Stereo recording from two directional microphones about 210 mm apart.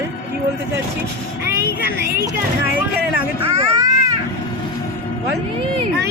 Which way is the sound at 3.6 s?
15° right (ahead or behind).